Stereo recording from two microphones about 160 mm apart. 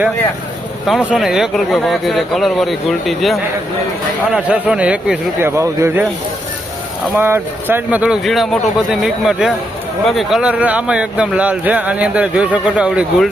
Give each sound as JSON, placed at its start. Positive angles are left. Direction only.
{"t": 0.9, "sound": "speech", "side_deg": 0}
{"t": 7.2, "sound": "speech", "side_deg": -15}